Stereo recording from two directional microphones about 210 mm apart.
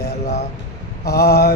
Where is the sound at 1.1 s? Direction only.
50° left (ahead or behind).